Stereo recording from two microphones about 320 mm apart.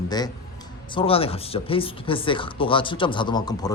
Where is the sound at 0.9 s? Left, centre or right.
Centre.